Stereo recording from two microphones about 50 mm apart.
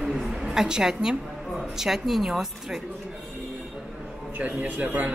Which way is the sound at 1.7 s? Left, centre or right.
Centre.